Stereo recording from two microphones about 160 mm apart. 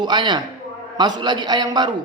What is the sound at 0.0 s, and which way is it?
A man's voice, 25° right (ahead or behind).